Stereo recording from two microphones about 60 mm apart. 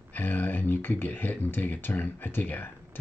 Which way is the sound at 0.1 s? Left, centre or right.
Left.